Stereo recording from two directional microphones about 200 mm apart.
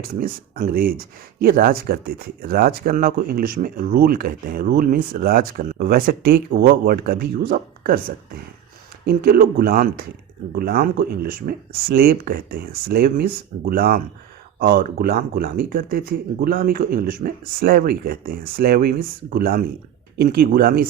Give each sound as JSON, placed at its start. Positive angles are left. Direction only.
{"t": 0.0, "sound": "speech", "side_deg": -45}
{"t": 9.0, "sound": "speech", "side_deg": -50}